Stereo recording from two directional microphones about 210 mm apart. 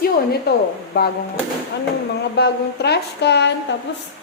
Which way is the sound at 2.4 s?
50° left (ahead or behind).